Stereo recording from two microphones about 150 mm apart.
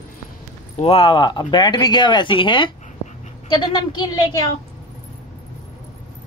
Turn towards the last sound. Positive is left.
turn(degrees=25)  # may be behind; listen again after turning